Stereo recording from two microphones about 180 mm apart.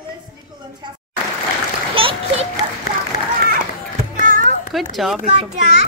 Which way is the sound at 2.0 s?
30° right (ahead or behind).